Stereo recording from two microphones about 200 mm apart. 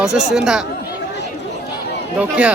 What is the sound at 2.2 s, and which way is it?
Speech, 5° right (ahead or behind).